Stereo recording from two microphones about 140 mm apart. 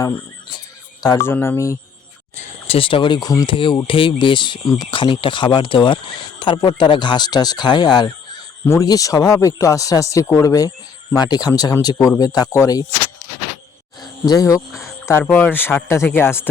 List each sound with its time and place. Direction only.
1.0 s speech: 20° left (ahead or behind)
2.3 s speech: 50° left (ahead or behind); by 12.8 s 20° left (ahead or behind)
14.0 s insect: 25° left (ahead or behind)
15.2 s speech: 10° left (ahead or behind)